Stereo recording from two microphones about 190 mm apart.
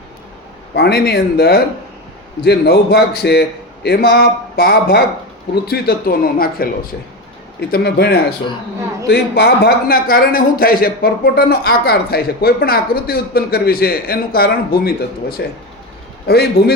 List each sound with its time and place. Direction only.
0.7 s a man's voice: 60° left (ahead or behind)
7.7 s a man's voice: 60° left (ahead or behind)